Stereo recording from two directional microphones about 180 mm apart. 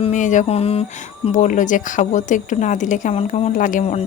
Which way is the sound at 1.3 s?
45° left (ahead or behind).